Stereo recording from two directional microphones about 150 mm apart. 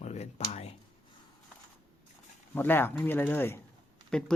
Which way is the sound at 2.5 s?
15° left (ahead or behind).